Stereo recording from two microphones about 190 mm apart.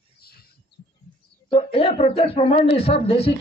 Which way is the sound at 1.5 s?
30° left (ahead or behind).